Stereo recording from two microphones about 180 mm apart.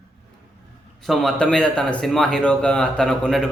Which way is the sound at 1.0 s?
Centre (ahead or behind).